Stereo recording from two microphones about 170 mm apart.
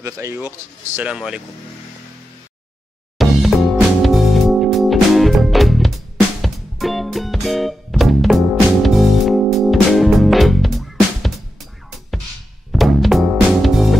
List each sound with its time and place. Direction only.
0.0 s speech: 15° right (ahead or behind)
0.9 s speech: 5° right (ahead or behind)
3.2 s music: centre (ahead or behind)
12.7 s music: centre (ahead or behind)